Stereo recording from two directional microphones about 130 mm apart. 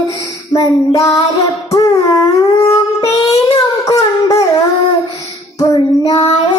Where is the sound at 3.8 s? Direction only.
25° left (ahead or behind).